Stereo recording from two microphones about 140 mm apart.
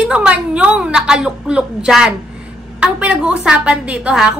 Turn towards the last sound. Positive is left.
turn(degrees=-5)  # may be behind; listen again after turning